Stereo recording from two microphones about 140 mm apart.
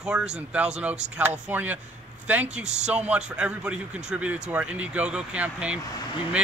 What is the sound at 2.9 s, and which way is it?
Speech, 10° right (ahead or behind).